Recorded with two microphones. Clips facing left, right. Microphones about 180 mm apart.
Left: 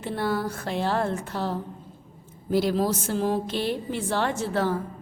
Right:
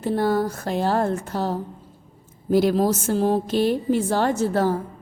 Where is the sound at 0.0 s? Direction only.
40° right (ahead or behind).